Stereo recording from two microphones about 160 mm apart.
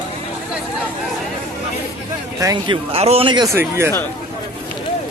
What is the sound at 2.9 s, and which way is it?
Speech, 40° right (ahead or behind).